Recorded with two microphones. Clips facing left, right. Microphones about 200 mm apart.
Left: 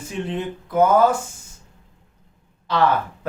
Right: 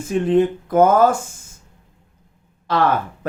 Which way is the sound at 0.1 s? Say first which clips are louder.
Right 11 dB; 50° right (ahead or behind).